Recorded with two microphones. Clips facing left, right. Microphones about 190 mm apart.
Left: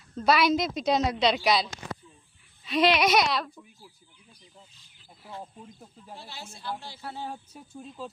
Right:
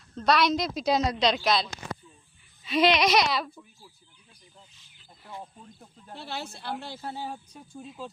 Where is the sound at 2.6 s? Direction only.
Centre (ahead or behind).